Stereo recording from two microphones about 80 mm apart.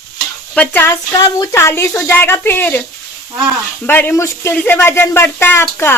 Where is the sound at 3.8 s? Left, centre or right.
Left.